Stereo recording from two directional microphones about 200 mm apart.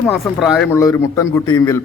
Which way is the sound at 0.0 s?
Centre (ahead or behind).